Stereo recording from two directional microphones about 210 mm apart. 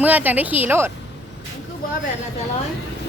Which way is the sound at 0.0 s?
10° right (ahead or behind).